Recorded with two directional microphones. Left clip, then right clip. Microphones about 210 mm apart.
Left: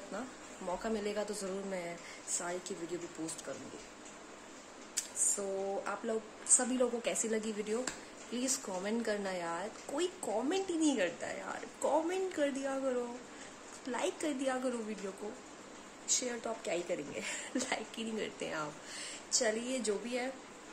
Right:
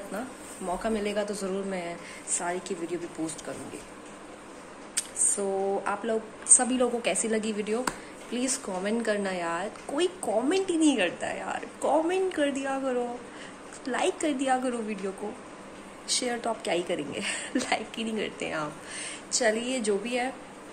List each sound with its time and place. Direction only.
0.7 s a woman's voice: 20° left (ahead or behind)
5.4 s a woman's voice: 15° left (ahead or behind)
16.1 s a woman's voice: 10° left (ahead or behind)